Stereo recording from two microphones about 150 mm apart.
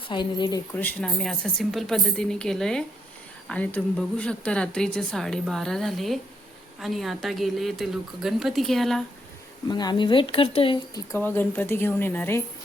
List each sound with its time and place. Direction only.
0.1 s speech: 30° left (ahead or behind)
0.8 s a woman's voice: 10° left (ahead or behind)
1.2 s a woman's voice: centre (ahead or behind)
9.6 s speech: 30° left (ahead or behind)
11.2 s a woman's voice: 10° left (ahead or behind)